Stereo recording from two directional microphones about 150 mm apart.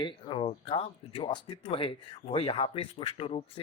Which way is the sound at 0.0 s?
35° left (ahead or behind).